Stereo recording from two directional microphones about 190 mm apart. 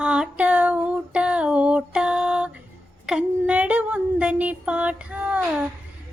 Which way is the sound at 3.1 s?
5° right (ahead or behind).